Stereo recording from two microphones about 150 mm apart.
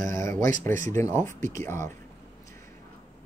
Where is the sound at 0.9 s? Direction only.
20° left (ahead or behind).